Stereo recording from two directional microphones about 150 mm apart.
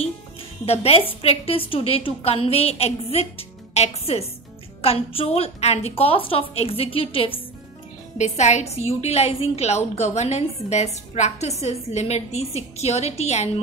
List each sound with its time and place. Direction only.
0.7 s a woman's voice: 40° left (ahead or behind)
8.2 s a woman's voice: 50° left (ahead or behind)